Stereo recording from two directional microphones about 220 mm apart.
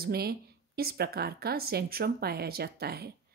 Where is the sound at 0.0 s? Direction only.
45° right (ahead or behind).